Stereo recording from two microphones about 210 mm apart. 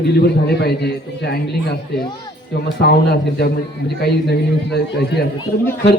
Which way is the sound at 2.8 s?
50° left (ahead or behind).